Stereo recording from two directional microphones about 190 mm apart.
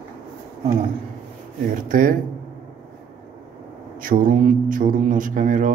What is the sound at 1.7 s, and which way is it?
Speech, 45° right (ahead or behind).